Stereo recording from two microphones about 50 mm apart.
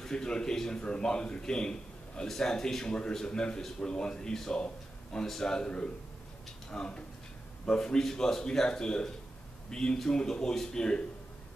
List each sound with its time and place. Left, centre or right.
0.0 s a man's voice: centre